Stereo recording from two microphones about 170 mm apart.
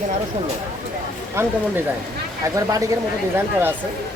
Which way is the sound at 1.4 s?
15° right (ahead or behind).